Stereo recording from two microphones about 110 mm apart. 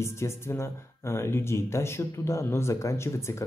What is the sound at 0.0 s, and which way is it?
Speech, 25° left (ahead or behind).